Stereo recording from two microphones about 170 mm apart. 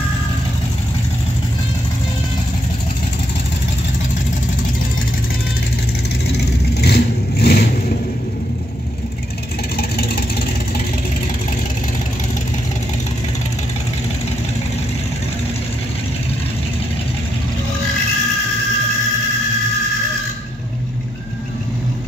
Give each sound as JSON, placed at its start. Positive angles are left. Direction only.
{"t": 6.3, "sound": "vehicle", "side_deg": 75}
{"t": 9.8, "sound": "vehicle", "side_deg": 65}